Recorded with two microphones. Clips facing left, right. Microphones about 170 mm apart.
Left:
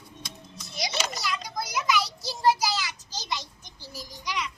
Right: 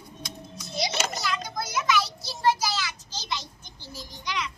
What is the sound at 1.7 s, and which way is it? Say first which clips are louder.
Child singing: right 1 dB; 15° left (ahead or behind).